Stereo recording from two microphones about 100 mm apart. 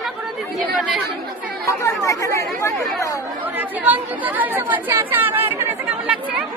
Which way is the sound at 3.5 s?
15° right (ahead or behind).